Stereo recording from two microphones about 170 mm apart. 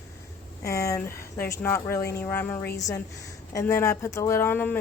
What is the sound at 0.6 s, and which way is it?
Speech, 15° left (ahead or behind).